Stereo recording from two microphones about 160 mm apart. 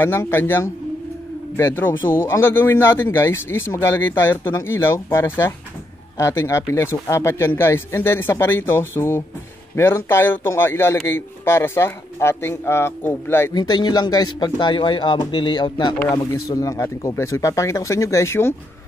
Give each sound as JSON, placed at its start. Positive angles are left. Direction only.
{"t": 0.0, "sound": "a man's voice", "side_deg": 15}
{"t": 13.6, "sound": "speech", "side_deg": 25}